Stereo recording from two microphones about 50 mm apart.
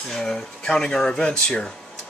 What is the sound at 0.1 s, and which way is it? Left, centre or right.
Speech, centre.